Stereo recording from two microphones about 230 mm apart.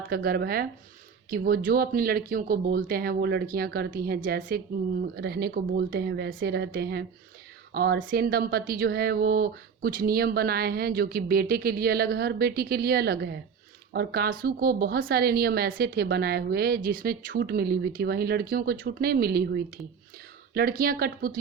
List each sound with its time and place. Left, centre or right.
0.1 s a woman's voice: right